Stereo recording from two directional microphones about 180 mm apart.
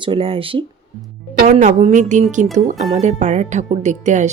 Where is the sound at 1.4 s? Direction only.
45° right (ahead or behind).